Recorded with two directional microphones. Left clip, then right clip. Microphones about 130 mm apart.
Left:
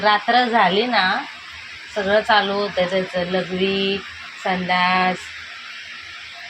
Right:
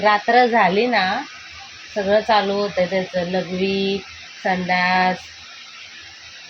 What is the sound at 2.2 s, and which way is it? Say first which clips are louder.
Speech: even; 25° right (ahead or behind).